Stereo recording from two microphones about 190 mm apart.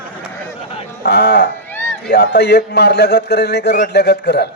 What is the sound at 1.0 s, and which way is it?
Speech, 60° left (ahead or behind).